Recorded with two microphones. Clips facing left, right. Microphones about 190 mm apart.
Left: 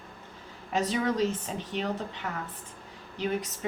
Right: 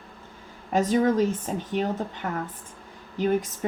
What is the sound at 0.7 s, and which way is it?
A woman's voice, 45° right (ahead or behind).